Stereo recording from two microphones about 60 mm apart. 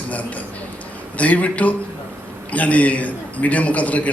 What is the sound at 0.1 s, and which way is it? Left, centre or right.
A man's voice, left.